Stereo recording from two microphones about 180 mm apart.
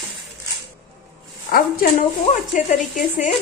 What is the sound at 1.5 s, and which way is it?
Speech, 55° left (ahead or behind).